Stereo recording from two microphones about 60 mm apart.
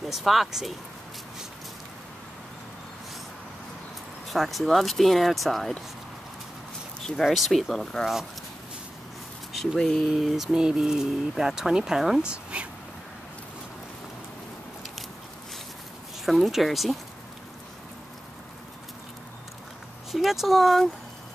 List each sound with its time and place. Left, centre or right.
0.1 s speech: centre
4.3 s speech: centre
7.1 s speech: centre
9.5 s speech: centre
10.0 s speech: centre
12.3 s speech: centre
16.3 s speech: centre
20.1 s speech: centre